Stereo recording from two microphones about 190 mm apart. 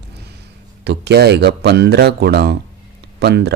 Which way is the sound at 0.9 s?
60° right (ahead or behind).